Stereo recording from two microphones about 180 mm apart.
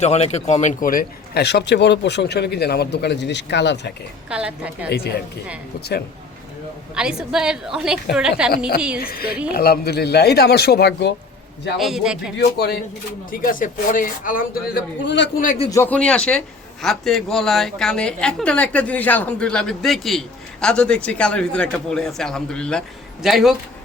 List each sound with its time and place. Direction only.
0.0 s speech: 35° left (ahead or behind); by 3.9 s 75° left (ahead or behind)
4.3 s a woman's voice: 5° right (ahead or behind)
4.9 s speech: 65° left (ahead or behind)
6.9 s a woman's voice: 5° right (ahead or behind)
9.0 s speech: 55° left (ahead or behind)
11.8 s a woman's voice: centre (ahead or behind)
12.4 s speech: 65° left (ahead or behind)
13.3 s speech: 50° left (ahead or behind); by 15.3 s 75° left (ahead or behind)
15.7 s a woman's voice: 10° left (ahead or behind)